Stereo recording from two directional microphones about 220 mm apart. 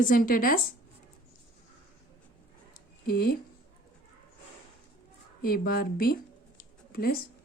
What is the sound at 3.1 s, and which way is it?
Speech, 45° left (ahead or behind).